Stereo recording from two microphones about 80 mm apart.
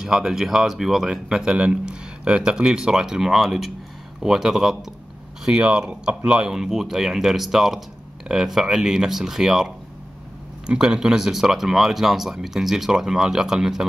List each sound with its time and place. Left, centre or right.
0.0 s speech: centre
10.7 s speech: centre